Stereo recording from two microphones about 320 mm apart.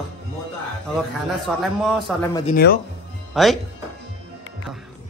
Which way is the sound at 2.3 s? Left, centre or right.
Left.